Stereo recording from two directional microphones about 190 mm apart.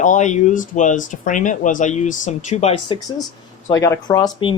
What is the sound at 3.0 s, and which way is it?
Speech, 20° left (ahead or behind).